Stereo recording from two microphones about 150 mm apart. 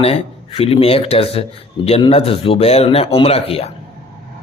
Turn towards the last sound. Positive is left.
turn(degrees=40)  # may be behind; listen again after turning